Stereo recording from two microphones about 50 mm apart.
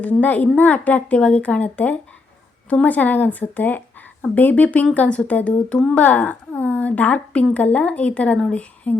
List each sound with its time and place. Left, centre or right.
0.0 s a woman's voice: left